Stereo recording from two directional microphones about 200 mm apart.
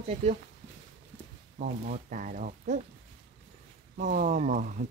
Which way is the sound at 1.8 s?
40° right (ahead or behind).